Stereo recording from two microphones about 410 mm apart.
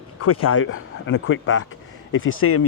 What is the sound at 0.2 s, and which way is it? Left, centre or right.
Speech, left.